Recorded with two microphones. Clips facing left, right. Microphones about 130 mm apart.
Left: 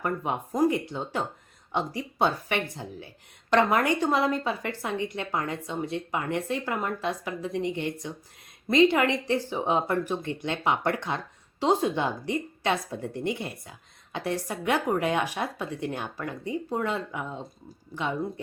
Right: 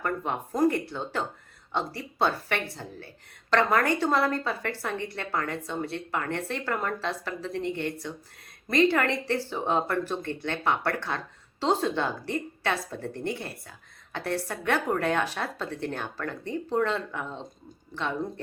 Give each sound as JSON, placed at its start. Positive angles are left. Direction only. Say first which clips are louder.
{"t": 0.0, "sound": "a woman's voice", "louder": "left 1 dB", "side_deg": 15}